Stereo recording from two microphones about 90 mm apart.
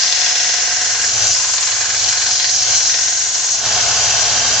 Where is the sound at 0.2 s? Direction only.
Centre (ahead or behind).